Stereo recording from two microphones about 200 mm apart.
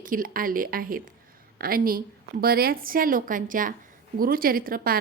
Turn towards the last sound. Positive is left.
turn(degrees=-45)  # may be behind; listen again after turning